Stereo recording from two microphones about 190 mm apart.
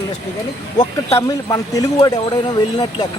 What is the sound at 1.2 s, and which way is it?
Speech, 20° left (ahead or behind).